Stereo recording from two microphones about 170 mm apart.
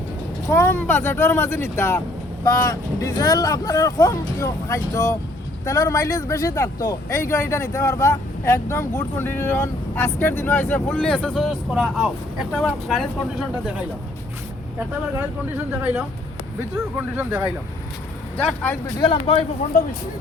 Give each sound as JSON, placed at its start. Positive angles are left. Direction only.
{"t": 0.5, "sound": "speech", "side_deg": 15}
{"t": 15.5, "sound": "speech", "side_deg": -10}
{"t": 18.3, "sound": "speech", "side_deg": 10}
{"t": 18.9, "sound": "speech", "side_deg": 30}